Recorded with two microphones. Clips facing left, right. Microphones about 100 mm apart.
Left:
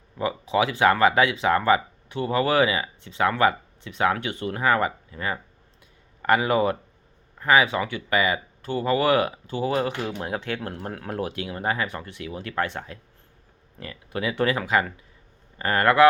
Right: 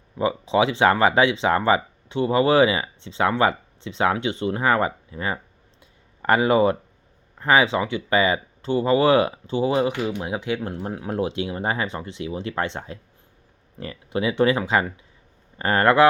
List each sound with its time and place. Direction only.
0.2 s speech: 25° right (ahead or behind); by 11.1 s 10° right (ahead or behind)
11.1 s speech: 25° right (ahead or behind)